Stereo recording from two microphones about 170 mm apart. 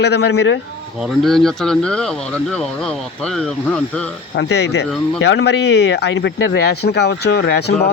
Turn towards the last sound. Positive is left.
turn(degrees=75)  # may be behind; listen again after turning